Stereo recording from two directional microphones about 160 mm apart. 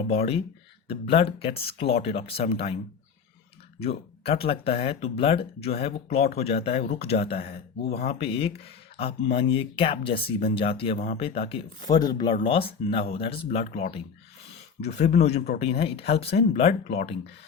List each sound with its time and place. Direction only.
0.1 s speech: 40° left (ahead or behind)
3.8 s speech: 40° left (ahead or behind)